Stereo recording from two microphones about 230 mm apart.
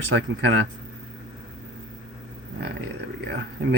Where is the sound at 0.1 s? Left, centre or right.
Right.